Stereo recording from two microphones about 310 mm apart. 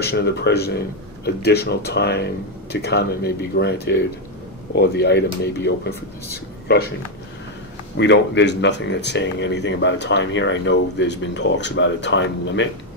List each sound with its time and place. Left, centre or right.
0.0 s speech: left
8.0 s speech: left